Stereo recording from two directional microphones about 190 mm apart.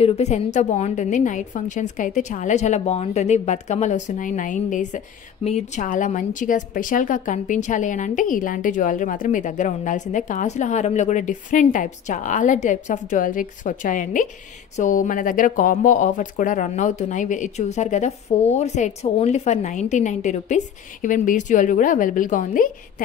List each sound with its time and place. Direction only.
0.0 s a woman's voice: 35° left (ahead or behind)